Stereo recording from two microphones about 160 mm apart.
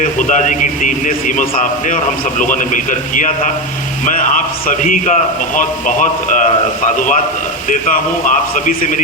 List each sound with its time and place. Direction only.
0.2 s a man's voice: 50° left (ahead or behind)